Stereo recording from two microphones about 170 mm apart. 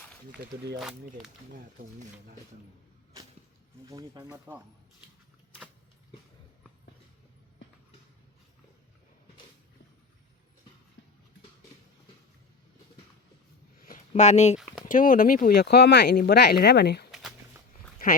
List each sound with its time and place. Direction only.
0.8 s speech: 5° right (ahead or behind)
3.8 s speech: 20° right (ahead or behind)
14.1 s speech: 45° left (ahead or behind)
14.8 s speech: 55° left (ahead or behind); by 17.1 s 75° left (ahead or behind)
18.0 s speech: 55° left (ahead or behind)